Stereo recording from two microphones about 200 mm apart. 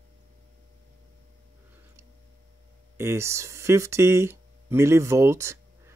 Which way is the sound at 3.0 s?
15° right (ahead or behind).